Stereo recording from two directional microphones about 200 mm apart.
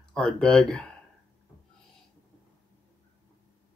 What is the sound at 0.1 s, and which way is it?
Speech, 5° left (ahead or behind).